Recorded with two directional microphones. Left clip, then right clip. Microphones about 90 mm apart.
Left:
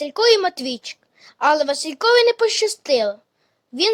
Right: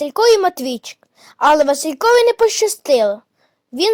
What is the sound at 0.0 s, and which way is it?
A child's voice, 35° right (ahead or behind).